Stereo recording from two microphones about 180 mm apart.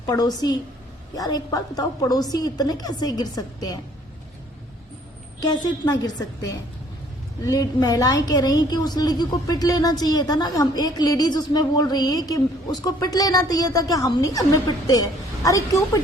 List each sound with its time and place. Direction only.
0.1 s a woman's voice: 20° left (ahead or behind)
5.5 s a woman's voice: 20° left (ahead or behind)